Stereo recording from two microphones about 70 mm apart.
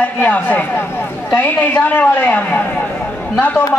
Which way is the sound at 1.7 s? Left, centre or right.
Left.